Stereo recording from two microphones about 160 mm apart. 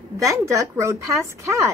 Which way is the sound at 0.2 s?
20° right (ahead or behind).